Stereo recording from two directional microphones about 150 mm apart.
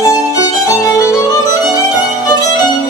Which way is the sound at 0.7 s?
20° left (ahead or behind).